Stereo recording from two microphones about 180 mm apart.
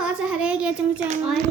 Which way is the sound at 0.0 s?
5° right (ahead or behind).